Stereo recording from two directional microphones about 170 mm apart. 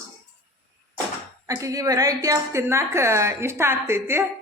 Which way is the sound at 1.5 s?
20° right (ahead or behind).